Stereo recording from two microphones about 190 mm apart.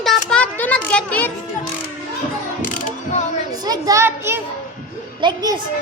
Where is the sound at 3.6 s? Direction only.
20° right (ahead or behind).